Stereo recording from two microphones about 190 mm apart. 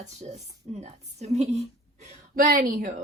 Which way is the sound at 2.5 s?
45° right (ahead or behind).